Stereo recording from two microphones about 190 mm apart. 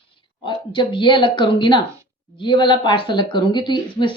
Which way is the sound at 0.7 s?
25° left (ahead or behind).